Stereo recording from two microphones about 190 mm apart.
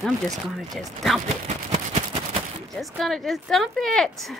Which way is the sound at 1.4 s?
35° right (ahead or behind).